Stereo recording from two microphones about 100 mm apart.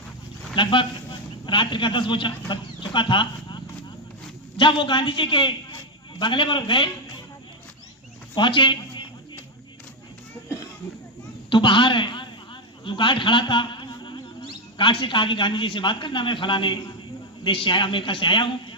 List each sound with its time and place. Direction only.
0.5 s a man's voice: 55° left (ahead or behind)
8.4 s a man's voice: 55° left (ahead or behind)
11.4 s a man's voice: 55° left (ahead or behind)